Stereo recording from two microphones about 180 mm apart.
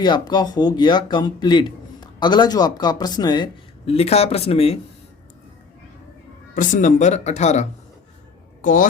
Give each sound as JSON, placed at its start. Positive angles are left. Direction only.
{"t": 0.0, "sound": "speech", "side_deg": 25}
{"t": 6.5, "sound": "speech", "side_deg": 45}